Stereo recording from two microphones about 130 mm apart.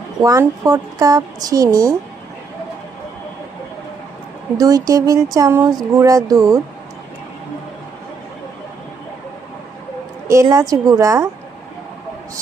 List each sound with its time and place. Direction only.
0.2 s a woman's voice: 30° right (ahead or behind)
4.5 s a woman's voice: 30° right (ahead or behind)
5.6 s a sound: 30° right (ahead or behind)
6.0 s a woman's voice: 25° right (ahead or behind)
10.4 s a woman's voice: 25° right (ahead or behind)